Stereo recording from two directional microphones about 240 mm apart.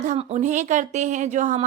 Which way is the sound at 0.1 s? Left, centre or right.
Right.